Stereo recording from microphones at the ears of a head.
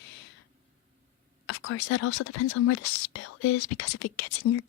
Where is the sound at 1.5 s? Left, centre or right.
Left.